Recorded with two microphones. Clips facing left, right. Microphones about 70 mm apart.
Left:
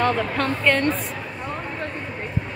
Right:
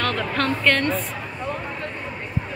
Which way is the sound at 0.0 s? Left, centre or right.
Centre.